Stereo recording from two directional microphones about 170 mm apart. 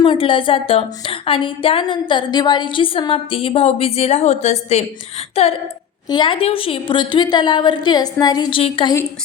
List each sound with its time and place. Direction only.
0.0 s a woman's voice: 30° left (ahead or behind)